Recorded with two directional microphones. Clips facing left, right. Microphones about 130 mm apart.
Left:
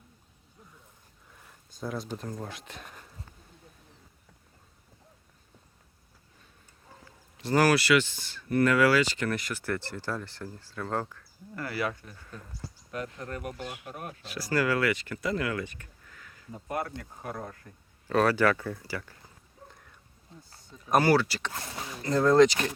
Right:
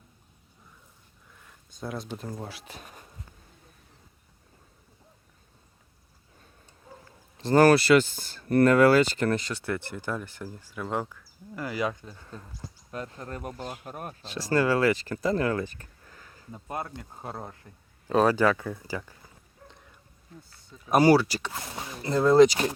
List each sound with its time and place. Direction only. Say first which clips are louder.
1.8 s speech: even; centre (ahead or behind)
7.3 s speech: right 5 dB; 30° right (ahead or behind)
12.0 s speech: right 2 dB; 30° right (ahead or behind)
20.3 s speech: right 3 dB; 25° left (ahead or behind)
21.0 s speech: right 7 dB; 15° right (ahead or behind)